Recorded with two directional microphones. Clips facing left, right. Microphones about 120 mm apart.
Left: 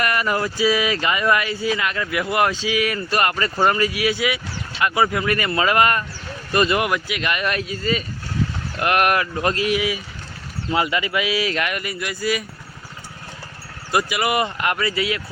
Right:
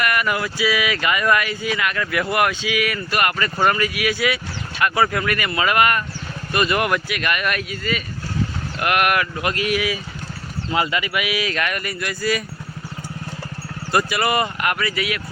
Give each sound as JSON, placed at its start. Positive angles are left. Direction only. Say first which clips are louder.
{"t": 0.0, "sound": "speech", "louder": "even", "side_deg": 30}
{"t": 5.3, "sound": "speech", "louder": "left 1 dB", "side_deg": 30}
{"t": 13.9, "sound": "speech", "louder": "right 1 dB", "side_deg": 15}
{"t": 14.6, "sound": "speech", "louder": "left 1 dB", "side_deg": 25}